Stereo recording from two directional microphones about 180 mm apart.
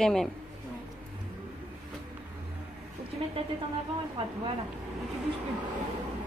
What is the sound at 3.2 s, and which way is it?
Speech, 30° right (ahead or behind).